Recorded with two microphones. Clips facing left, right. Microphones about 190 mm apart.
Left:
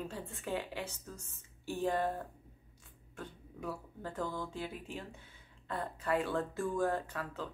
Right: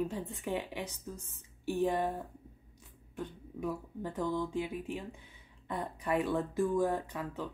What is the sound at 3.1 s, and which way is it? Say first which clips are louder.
Speech: right 6 dB; 15° right (ahead or behind).